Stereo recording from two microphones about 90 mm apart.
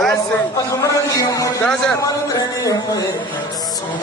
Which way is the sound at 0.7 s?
40° left (ahead or behind).